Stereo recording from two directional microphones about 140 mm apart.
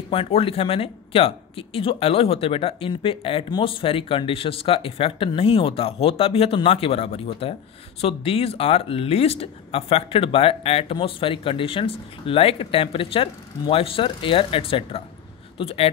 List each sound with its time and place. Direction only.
0.1 s speech: 45° left (ahead or behind)